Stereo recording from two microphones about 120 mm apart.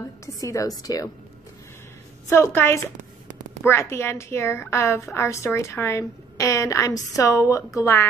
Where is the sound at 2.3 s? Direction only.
20° left (ahead or behind).